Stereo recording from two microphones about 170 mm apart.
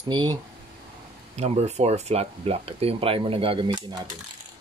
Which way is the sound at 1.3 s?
40° right (ahead or behind).